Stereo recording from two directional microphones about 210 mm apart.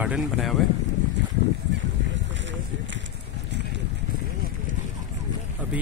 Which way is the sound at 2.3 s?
60° right (ahead or behind).